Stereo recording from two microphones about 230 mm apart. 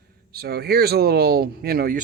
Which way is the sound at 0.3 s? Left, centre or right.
Right.